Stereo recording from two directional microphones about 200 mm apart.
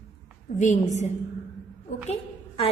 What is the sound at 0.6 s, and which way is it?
Speech, 35° left (ahead or behind).